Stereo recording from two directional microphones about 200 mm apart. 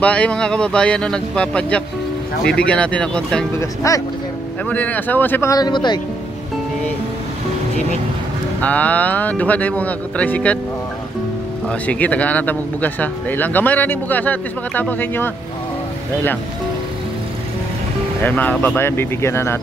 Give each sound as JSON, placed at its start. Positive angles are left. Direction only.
{"t": 0.0, "sound": "speech", "side_deg": 5}
{"t": 3.5, "sound": "speech", "side_deg": 15}
{"t": 8.5, "sound": "speech", "side_deg": 5}
{"t": 11.8, "sound": "speech", "side_deg": 5}
{"t": 18.2, "sound": "speech", "side_deg": 10}